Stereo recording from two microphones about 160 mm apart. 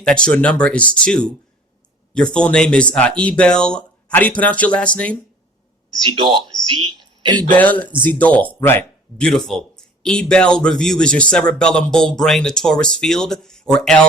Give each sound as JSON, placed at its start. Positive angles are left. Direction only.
{"t": 0.0, "sound": "speech", "side_deg": 5}
{"t": 6.1, "sound": "speech", "side_deg": -30}
{"t": 6.9, "sound": "a sound", "side_deg": -30}
{"t": 7.5, "sound": "speech", "side_deg": 10}